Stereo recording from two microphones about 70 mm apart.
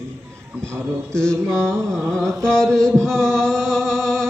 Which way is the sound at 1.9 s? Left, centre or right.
Centre.